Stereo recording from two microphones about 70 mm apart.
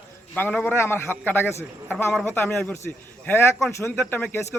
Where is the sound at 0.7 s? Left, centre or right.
Left.